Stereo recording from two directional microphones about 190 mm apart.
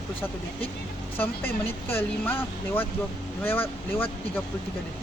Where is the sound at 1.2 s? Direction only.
10° left (ahead or behind).